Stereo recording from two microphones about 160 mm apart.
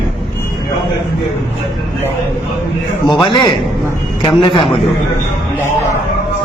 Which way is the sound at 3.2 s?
30° left (ahead or behind).